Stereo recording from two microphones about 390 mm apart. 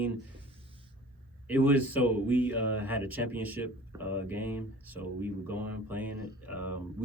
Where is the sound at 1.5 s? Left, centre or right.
Centre.